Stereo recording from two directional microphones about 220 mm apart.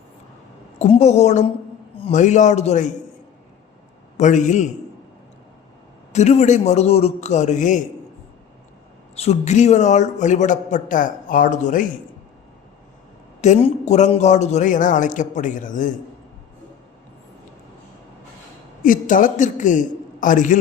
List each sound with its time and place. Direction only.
0.8 s a man's voice: 30° left (ahead or behind)
4.2 s a man's voice: 35° left (ahead or behind)
6.1 s a man's voice: 30° left (ahead or behind)
9.1 s a man's voice: 30° left (ahead or behind)
13.4 s a man's voice: 30° left (ahead or behind)
18.8 s a man's voice: 35° left (ahead or behind)